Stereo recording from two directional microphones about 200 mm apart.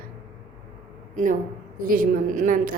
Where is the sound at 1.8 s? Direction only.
45° right (ahead or behind).